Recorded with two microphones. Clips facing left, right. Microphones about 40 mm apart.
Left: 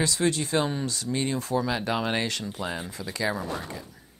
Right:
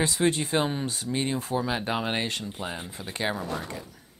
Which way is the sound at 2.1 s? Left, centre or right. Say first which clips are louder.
Left 1 dB; left.